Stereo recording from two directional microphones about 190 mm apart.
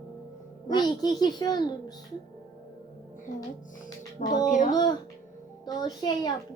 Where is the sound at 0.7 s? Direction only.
20° left (ahead or behind).